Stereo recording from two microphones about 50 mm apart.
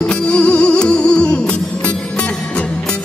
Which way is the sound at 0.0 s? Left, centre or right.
Left.